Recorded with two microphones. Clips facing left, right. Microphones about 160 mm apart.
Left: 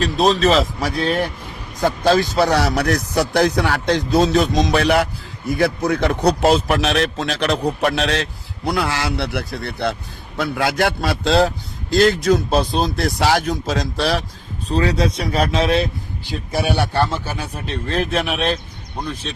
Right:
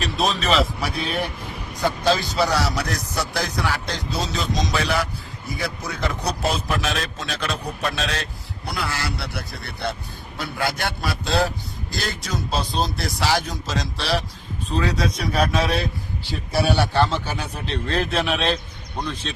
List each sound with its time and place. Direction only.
0.0 s speech: 40° left (ahead or behind)
2.0 s a man's voice: 50° left (ahead or behind)
14.8 s a man's voice: 30° left (ahead or behind); by 19.4 s 10° left (ahead or behind)